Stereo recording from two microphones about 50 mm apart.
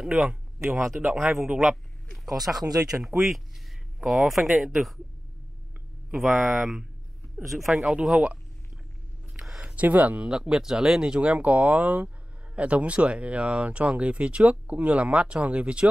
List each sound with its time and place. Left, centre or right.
0.0 s speech: centre
1.0 s a man's voice: right
1.4 s speech: centre
6.1 s speech: centre
7.9 s speech: centre
9.4 s a sound: centre
9.8 s speech: right
10.2 s speech: centre
11.1 s speech: right